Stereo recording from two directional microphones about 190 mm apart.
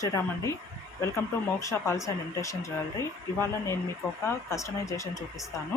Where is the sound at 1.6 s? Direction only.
15° left (ahead or behind).